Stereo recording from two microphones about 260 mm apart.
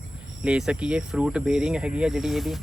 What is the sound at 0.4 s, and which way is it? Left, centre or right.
Speech, centre.